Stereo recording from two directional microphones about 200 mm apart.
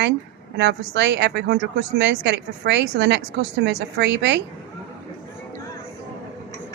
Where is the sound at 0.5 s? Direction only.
60° right (ahead or behind).